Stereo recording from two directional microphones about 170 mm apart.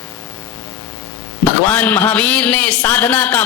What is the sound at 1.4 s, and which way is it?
A man's voice, 10° left (ahead or behind).